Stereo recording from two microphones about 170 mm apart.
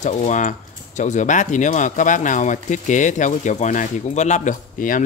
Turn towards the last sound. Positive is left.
turn(degrees=50)  # may be behind; listen again after turning